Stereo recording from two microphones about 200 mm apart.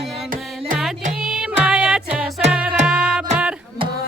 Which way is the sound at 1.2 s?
5° right (ahead or behind).